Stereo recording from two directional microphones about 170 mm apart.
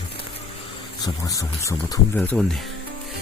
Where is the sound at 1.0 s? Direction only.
20° left (ahead or behind).